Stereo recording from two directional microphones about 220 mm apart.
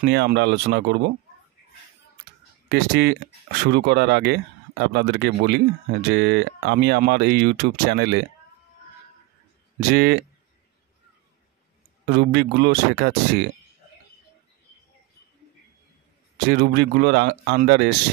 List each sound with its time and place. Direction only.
0.0 s speech: 50° right (ahead or behind)
2.7 s speech: 45° right (ahead or behind)
9.8 s speech: 50° right (ahead or behind)
12.1 s speech: 50° right (ahead or behind)
16.4 s speech: 50° right (ahead or behind)